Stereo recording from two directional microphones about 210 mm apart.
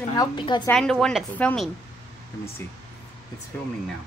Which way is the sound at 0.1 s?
20° left (ahead or behind).